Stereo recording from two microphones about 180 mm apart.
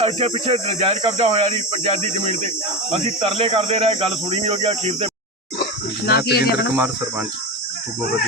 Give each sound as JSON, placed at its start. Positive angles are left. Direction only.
{"t": 0.0, "sound": "speech", "side_deg": -35}
{"t": 6.1, "sound": "speech", "side_deg": 60}
{"t": 6.7, "sound": "speech", "side_deg": -10}